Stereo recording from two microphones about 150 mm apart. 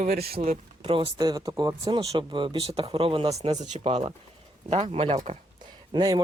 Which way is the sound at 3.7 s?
40° right (ahead or behind).